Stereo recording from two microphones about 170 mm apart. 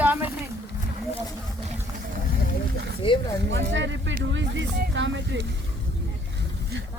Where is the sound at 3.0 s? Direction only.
30° left (ahead or behind).